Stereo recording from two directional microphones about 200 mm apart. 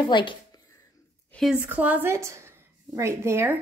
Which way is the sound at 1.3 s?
5° right (ahead or behind).